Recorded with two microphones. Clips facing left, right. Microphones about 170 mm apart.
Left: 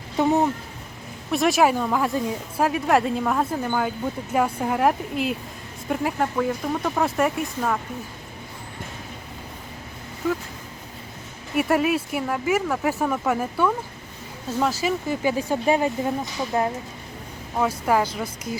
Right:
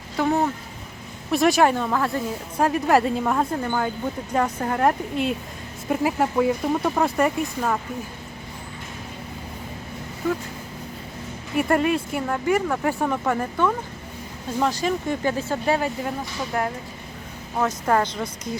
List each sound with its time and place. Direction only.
0.2 s speech: 20° left (ahead or behind)
1.3 s speech: centre (ahead or behind); by 2.2 s 15° left (ahead or behind)
2.6 s speech: centre (ahead or behind)
11.5 s speech: 5° left (ahead or behind); by 16.6 s 20° left (ahead or behind)
17.8 s speech: 5° left (ahead or behind)